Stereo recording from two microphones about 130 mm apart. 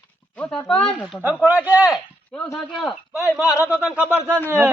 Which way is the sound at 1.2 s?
10° right (ahead or behind).